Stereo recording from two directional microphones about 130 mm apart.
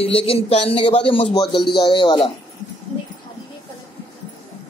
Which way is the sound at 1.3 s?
35° left (ahead or behind).